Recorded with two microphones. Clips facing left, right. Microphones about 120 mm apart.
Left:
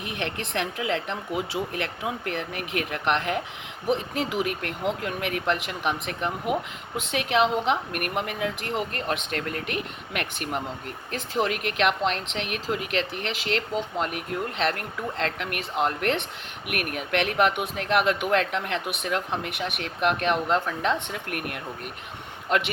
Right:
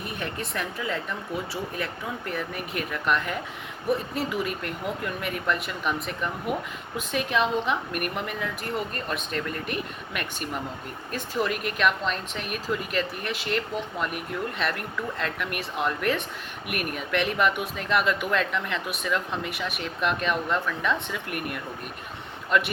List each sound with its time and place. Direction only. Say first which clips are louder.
0.0 s speech: left 1 dB; 80° left
14.3 s speech: left 4 dB; 55° left (ahead or behind)